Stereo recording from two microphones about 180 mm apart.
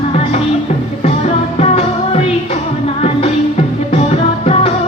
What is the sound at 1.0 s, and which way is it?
Music, 35° left (ahead or behind).